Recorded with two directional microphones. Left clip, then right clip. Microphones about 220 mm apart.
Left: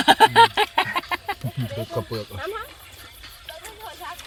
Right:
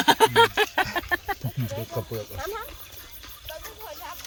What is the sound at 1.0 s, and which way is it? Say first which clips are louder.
Speech: left 1 dB; 35° left (ahead or behind).